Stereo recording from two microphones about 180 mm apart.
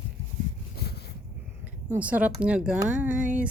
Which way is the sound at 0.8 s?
65° left (ahead or behind).